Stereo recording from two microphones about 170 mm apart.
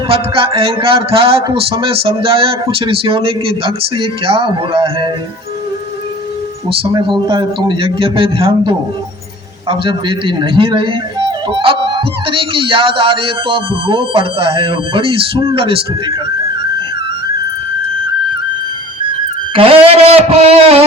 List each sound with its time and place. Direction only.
0.1 s speech: 35° right (ahead or behind)
6.7 s speech: 25° right (ahead or behind)
19.5 s speech: 30° right (ahead or behind)